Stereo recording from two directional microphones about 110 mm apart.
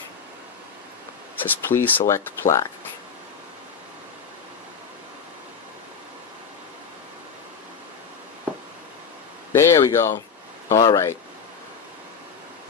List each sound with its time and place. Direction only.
1.5 s speech: 20° left (ahead or behind)
9.5 s speech: 25° left (ahead or behind)